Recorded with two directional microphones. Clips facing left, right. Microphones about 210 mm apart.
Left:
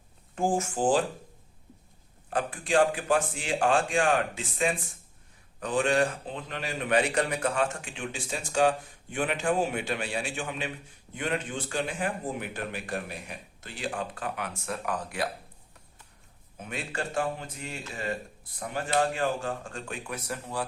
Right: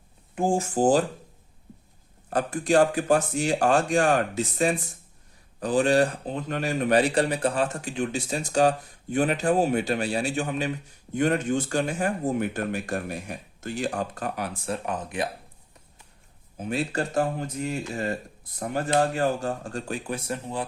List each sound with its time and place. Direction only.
0.3 s speech: 25° right (ahead or behind)
2.3 s speech: 40° right (ahead or behind); by 15.3 s 20° right (ahead or behind)
16.6 s speech: 35° right (ahead or behind)